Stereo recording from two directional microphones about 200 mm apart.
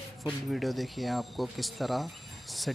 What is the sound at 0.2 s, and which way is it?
Speech, centre (ahead or behind).